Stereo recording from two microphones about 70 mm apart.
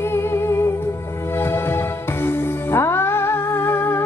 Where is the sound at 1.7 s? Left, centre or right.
Left.